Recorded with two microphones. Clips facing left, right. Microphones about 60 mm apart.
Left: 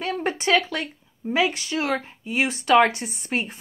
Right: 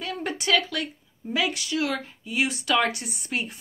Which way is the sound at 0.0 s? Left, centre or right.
Left.